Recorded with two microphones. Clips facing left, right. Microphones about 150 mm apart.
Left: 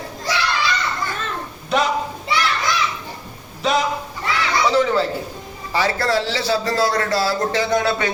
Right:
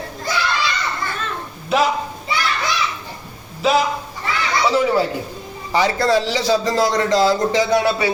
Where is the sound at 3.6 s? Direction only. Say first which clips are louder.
Right 2 dB; 5° right (ahead or behind).